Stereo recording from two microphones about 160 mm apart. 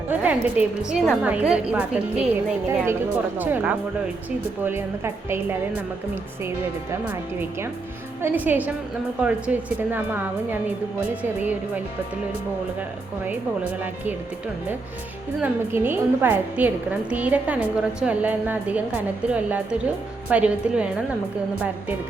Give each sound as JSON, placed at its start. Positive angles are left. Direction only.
{"t": 0.1, "sound": "a woman's voice", "side_deg": -10}
{"t": 8.2, "sound": "a woman's voice", "side_deg": -10}
{"t": 13.8, "sound": "a woman's voice", "side_deg": -10}
{"t": 15.4, "sound": "a woman's voice", "side_deg": -10}